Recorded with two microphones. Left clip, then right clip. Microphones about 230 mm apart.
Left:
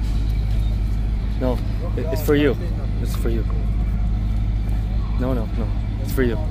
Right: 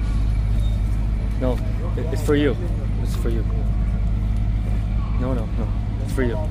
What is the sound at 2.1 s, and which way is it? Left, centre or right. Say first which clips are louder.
Speech: left 2 dB; centre.